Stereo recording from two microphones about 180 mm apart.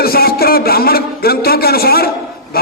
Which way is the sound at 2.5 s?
55° left (ahead or behind).